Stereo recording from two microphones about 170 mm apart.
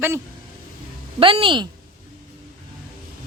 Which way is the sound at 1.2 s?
30° right (ahead or behind).